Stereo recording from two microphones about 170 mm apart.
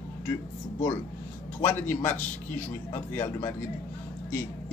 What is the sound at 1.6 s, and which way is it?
A man's voice, 10° left (ahead or behind).